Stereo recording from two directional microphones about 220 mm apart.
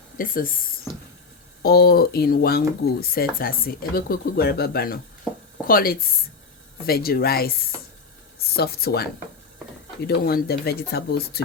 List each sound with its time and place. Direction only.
0.2 s speech: 40° left (ahead or behind)
1.6 s speech: 45° left (ahead or behind)
8.5 s speech: 45° left (ahead or behind)
10.1 s speech: 45° left (ahead or behind)